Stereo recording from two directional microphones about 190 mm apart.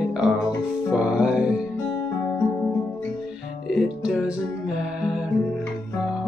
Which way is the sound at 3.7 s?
5° right (ahead or behind).